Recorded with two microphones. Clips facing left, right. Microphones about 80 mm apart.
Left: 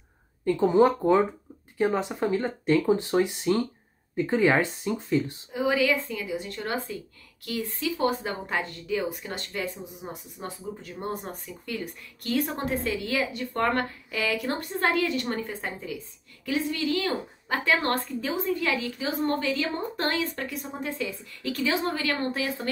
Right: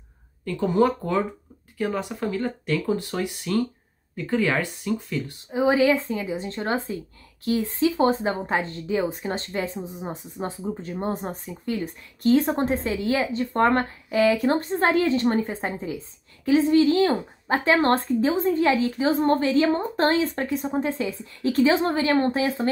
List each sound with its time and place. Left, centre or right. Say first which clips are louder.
0.5 s speech: left 1 dB; left
5.5 s a woman's voice: right 5 dB; right